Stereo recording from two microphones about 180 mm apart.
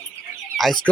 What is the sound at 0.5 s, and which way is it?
Speech, centre (ahead or behind).